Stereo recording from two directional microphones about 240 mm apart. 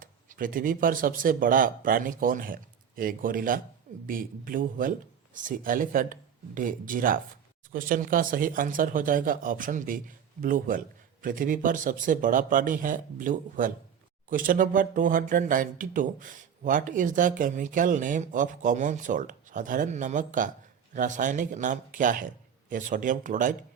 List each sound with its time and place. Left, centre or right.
0.0 s speech: right